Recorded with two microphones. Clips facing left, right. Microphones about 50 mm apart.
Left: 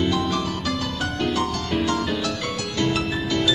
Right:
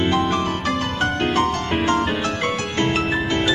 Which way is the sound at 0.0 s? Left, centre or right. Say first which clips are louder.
Right 3 dB; right.